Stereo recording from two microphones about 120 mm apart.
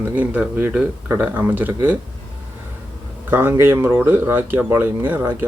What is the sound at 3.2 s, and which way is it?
Speech, 15° right (ahead or behind).